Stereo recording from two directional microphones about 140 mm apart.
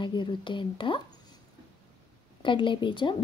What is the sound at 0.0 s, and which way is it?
Speech, 35° left (ahead or behind).